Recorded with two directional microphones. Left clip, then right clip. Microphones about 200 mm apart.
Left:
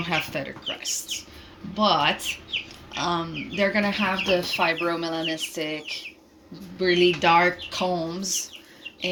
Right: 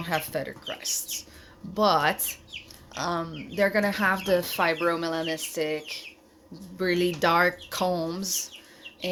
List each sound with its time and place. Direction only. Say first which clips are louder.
0.0 s speech: left 2 dB; 25° right (ahead or behind)